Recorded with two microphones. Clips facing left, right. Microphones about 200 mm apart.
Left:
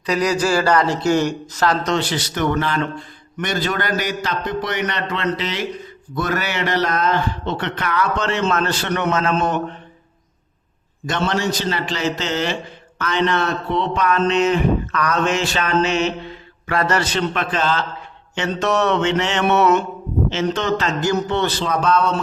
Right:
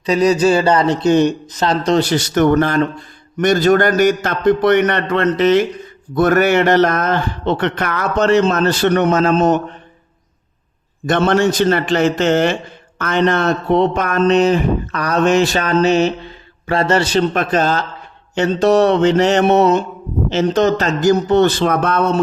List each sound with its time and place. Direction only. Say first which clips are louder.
0.0 s a man's voice: right 6 dB; 25° right (ahead or behind)
11.0 s a man's voice: right 7 dB; 55° right (ahead or behind)
21.6 s speech: right 3 dB; 60° right (ahead or behind)